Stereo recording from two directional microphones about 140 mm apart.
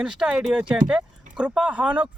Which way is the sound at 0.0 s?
5° right (ahead or behind).